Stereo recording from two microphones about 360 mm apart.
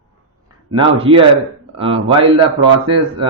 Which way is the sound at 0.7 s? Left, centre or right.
Centre.